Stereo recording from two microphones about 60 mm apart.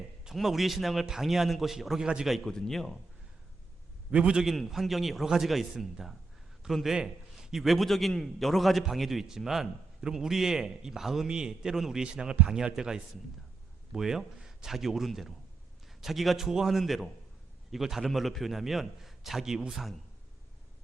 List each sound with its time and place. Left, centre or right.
0.3 s a man's voice: centre
2.4 s a man's voice: centre
4.1 s a man's voice: centre
4.5 s a man's voice: centre